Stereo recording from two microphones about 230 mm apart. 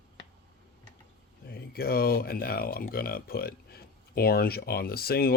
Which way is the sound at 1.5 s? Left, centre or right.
Left.